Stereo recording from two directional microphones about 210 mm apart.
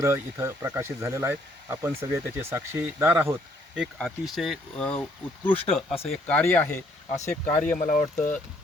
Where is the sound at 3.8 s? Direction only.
Centre (ahead or behind).